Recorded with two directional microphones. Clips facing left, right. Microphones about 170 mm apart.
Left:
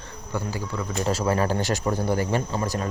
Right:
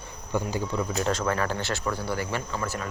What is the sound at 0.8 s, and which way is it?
Speech, centre (ahead or behind).